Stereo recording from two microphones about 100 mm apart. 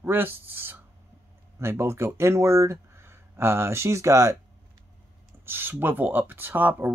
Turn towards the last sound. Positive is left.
turn(degrees=-20)  # may be behind; listen again after turning